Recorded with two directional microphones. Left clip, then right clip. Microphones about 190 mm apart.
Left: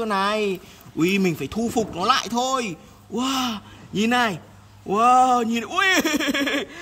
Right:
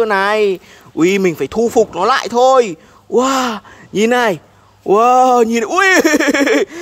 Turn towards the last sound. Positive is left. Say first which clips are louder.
# right 11 dB
turn(degrees=-20)  # may be behind; listen again after turning